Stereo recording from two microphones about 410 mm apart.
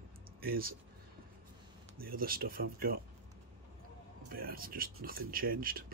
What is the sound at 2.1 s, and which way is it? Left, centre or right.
Speech, right.